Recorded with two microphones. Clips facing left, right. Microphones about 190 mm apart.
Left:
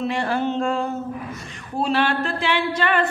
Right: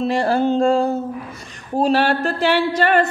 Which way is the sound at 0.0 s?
35° right (ahead or behind).